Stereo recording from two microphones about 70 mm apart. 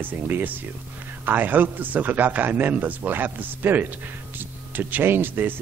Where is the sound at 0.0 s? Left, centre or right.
Right.